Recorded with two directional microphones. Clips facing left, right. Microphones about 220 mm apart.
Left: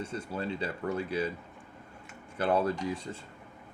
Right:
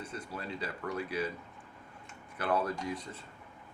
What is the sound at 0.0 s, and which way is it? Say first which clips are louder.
Speech: left 6 dB; 30° left (ahead or behind).